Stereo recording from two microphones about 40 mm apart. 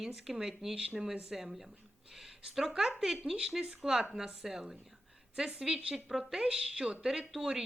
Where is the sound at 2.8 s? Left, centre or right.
Centre.